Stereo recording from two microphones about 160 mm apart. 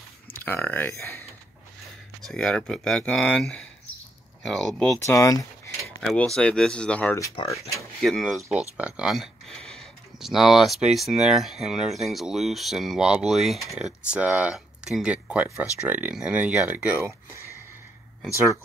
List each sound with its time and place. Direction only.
0.4 s speech: 10° left (ahead or behind)
2.2 s speech: 5° left (ahead or behind)
4.9 s speech: 20° left (ahead or behind)
6.0 s speech: 5° left (ahead or behind); by 18.6 s 20° right (ahead or behind)